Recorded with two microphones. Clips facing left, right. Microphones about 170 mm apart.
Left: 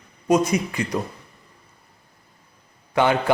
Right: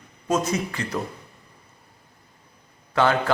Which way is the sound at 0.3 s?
15° left (ahead or behind).